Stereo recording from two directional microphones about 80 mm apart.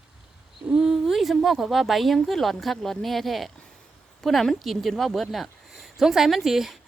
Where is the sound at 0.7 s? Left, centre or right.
Centre.